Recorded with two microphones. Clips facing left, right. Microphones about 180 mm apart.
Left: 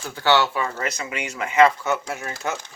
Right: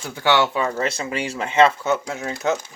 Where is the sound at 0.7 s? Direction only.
30° right (ahead or behind).